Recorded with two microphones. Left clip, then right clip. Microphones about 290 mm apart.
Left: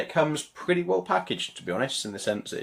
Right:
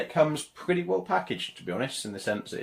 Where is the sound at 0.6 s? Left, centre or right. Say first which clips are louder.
Left 2 dB; left.